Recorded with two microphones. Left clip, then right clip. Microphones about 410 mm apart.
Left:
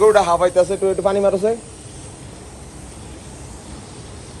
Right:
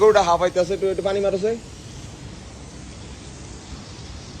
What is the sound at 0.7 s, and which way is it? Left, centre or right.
Speech, left.